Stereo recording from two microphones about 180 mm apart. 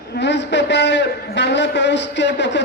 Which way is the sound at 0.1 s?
75° left (ahead or behind).